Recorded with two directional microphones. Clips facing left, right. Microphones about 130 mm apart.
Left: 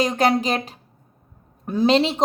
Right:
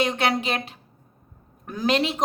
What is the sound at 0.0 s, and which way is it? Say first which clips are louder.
A woman's voice: left 4 dB; 40° left (ahead or behind).